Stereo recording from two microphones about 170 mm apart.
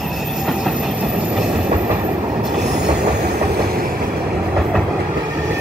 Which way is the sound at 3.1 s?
65° right (ahead or behind).